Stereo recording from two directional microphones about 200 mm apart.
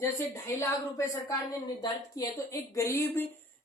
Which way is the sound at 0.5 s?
15° left (ahead or behind).